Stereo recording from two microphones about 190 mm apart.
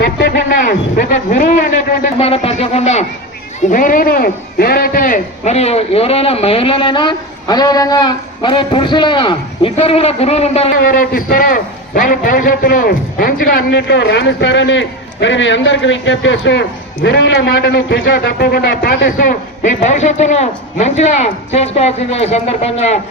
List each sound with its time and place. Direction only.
0.0 s speech: 60° left (ahead or behind); by 1.5 s 40° left (ahead or behind)
2.1 s a man's voice: 30° left (ahead or behind)
10.8 s a man's voice: 50° left (ahead or behind)